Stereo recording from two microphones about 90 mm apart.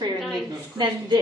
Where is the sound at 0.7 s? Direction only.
55° right (ahead or behind).